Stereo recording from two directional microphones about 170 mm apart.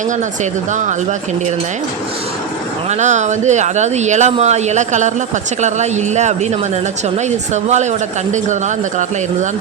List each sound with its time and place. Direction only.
0.7 s speech: 45° right (ahead or behind)
3.0 s speech: 45° right (ahead or behind)